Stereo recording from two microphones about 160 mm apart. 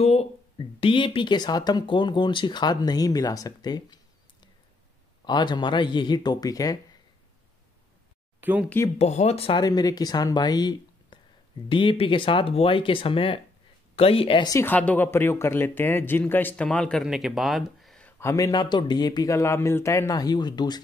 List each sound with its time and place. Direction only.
0.0 s a sound: 40° left (ahead or behind)
0.7 s speech: 35° left (ahead or behind)
5.2 s speech: 30° left (ahead or behind)
8.4 s speech: 10° right (ahead or behind)
8.9 s speech: 40° left (ahead or behind)
9.6 s speech: 25° left (ahead or behind)
14.5 s speech: 15° left (ahead or behind)
18.2 s speech: 20° left (ahead or behind)